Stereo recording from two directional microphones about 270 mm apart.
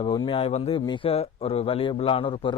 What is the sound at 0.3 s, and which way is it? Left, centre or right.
Speech, left.